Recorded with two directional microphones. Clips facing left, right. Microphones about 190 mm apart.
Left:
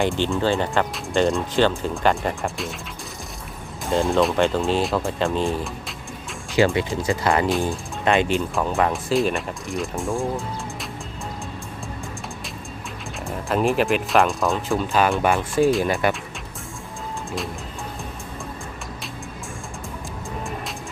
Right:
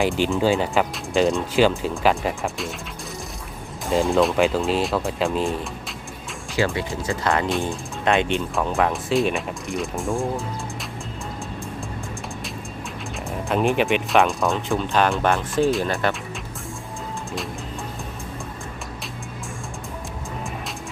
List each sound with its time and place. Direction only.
0.0 s speech: centre (ahead or behind)
3.8 s speech: centre (ahead or behind)
6.6 s speech: 20° left (ahead or behind)
7.3 s speech: 5° left (ahead or behind)
13.2 s speech: centre (ahead or behind)